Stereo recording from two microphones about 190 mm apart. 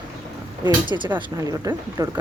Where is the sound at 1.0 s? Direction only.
15° right (ahead or behind).